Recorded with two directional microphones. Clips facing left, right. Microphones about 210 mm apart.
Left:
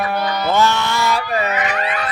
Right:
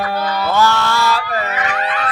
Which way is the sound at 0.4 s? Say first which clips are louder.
Right 1 dB; 20° left (ahead or behind).